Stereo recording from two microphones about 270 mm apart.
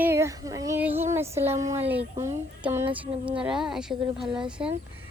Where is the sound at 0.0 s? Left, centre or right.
Centre.